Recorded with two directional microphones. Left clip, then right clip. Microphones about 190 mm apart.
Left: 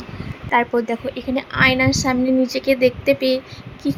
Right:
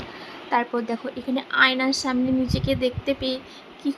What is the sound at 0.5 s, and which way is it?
Speech, 15° left (ahead or behind).